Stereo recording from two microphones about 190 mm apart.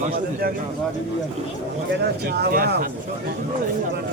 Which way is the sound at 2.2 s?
55° right (ahead or behind).